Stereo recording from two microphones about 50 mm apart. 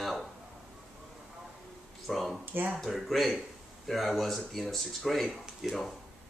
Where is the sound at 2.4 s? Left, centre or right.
Right.